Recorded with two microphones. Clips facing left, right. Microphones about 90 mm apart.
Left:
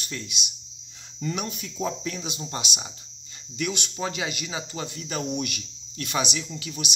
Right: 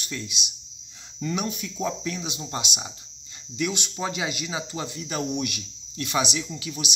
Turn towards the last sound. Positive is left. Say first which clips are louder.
# right 2 dB
turn(degrees=-10)  # may be behind; listen again after turning